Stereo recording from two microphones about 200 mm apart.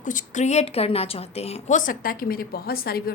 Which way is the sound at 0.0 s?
40° left (ahead or behind).